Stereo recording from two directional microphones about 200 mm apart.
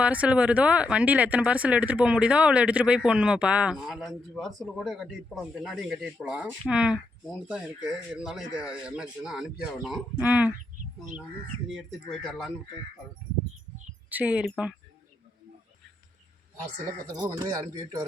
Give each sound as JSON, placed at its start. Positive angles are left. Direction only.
{"t": 0.0, "sound": "speech", "side_deg": -5}
{"t": 11.7, "sound": "speech", "side_deg": 0}
{"t": 14.1, "sound": "speech", "side_deg": -5}
{"t": 17.2, "sound": "a man's voice", "side_deg": -20}